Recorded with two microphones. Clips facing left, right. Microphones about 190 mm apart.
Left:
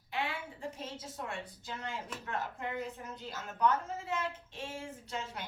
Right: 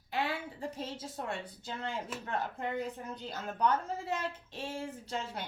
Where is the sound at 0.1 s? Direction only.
35° right (ahead or behind).